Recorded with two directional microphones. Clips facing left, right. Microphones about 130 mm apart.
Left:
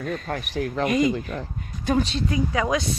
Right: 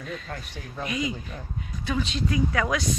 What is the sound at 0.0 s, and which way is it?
Speech, 55° left (ahead or behind).